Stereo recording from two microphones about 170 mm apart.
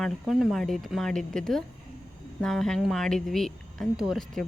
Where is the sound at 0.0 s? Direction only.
Centre (ahead or behind).